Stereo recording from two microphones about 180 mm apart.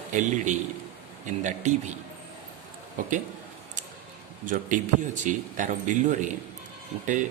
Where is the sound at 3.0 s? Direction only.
45° right (ahead or behind).